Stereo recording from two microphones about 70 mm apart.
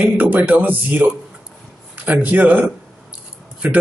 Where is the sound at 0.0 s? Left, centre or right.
Right.